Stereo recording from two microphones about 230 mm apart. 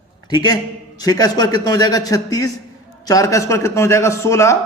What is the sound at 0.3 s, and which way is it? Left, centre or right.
A man's voice, centre.